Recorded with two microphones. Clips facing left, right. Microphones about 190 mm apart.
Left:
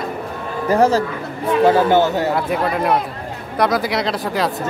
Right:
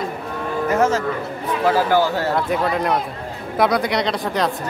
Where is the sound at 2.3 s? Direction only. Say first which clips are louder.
Left 1 dB; centre (ahead or behind).